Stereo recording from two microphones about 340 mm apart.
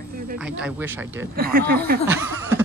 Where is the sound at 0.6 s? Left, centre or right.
Centre.